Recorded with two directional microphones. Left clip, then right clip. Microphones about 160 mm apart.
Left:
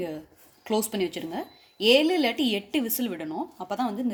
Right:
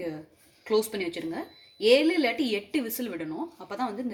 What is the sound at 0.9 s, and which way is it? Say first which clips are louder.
A woman's voice: left 2 dB; 90° left.